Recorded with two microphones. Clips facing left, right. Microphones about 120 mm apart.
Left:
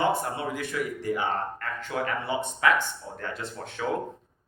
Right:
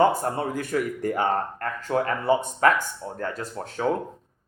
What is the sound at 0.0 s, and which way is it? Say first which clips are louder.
Speech: right 5 dB; 40° right (ahead or behind).